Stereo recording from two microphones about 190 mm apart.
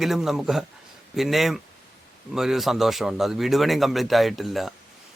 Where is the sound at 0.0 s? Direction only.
Centre (ahead or behind).